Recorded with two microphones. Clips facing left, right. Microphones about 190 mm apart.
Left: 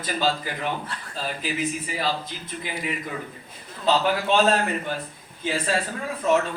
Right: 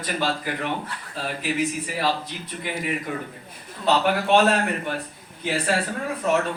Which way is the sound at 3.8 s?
65° right (ahead or behind).